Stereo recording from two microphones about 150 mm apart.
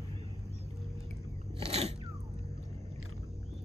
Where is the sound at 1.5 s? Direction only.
40° right (ahead or behind).